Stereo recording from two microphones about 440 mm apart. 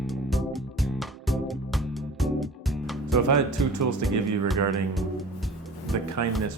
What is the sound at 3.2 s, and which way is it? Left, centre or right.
Speech, right.